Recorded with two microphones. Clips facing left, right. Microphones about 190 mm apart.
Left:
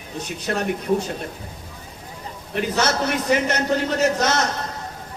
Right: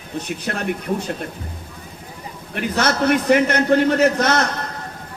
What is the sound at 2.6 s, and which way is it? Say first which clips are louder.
A man's voice: right 2 dB; 55° right (ahead or behind).